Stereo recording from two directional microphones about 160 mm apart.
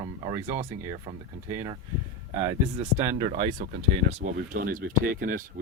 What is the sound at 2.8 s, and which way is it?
Speech, 15° right (ahead or behind).